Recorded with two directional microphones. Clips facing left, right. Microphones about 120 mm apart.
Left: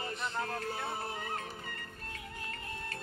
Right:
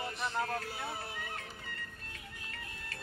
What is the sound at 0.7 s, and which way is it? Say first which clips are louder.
Music: left 3 dB; 50° left (ahead or behind).